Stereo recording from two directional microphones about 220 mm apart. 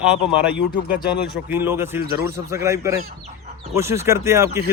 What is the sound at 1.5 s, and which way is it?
Speech, 10° right (ahead or behind).